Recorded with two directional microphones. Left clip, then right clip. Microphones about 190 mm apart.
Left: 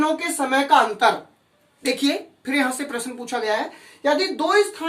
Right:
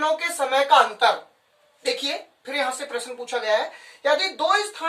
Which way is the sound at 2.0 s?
20° left (ahead or behind).